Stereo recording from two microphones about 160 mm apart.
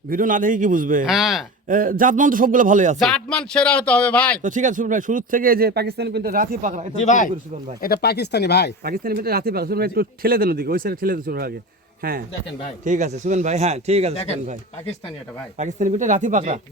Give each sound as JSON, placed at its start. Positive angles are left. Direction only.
{"t": 0.1, "sound": "speech", "side_deg": -55}
{"t": 1.0, "sound": "speech", "side_deg": 0}
{"t": 1.6, "sound": "speech", "side_deg": -60}
{"t": 3.0, "sound": "speech", "side_deg": 5}
{"t": 4.4, "sound": "speech", "side_deg": -55}
{"t": 7.0, "sound": "speech", "side_deg": 50}
{"t": 7.8, "sound": "speech", "side_deg": 80}
{"t": 8.8, "sound": "speech", "side_deg": -70}
{"t": 12.8, "sound": "speech", "side_deg": -50}
{"t": 15.5, "sound": "speech", "side_deg": -50}